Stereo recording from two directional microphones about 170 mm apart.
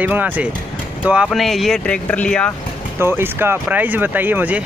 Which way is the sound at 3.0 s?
15° right (ahead or behind).